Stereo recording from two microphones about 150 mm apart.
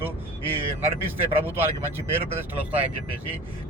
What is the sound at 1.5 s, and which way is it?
A man's voice, 15° right (ahead or behind).